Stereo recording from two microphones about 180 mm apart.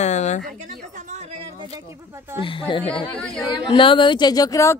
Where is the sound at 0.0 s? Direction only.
40° left (ahead or behind).